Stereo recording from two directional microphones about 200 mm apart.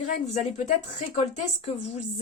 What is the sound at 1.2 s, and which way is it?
Speech, 30° left (ahead or behind).